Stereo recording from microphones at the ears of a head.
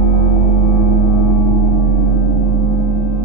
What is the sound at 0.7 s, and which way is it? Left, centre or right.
Gong, left.